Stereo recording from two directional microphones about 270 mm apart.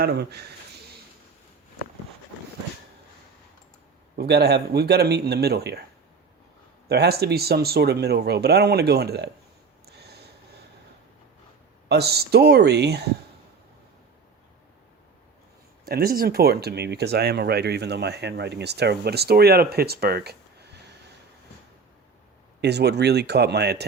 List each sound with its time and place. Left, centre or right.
0.0 s speech: right
4.2 s speech: right
6.8 s speech: right
9.8 s snort: right
11.9 s speech: right
15.9 s speech: right
22.6 s speech: right